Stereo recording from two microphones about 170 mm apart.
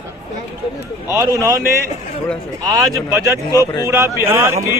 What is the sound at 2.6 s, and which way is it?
Speech, 20° right (ahead or behind).